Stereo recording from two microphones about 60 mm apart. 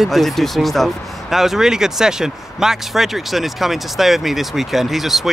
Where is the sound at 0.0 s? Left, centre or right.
Centre.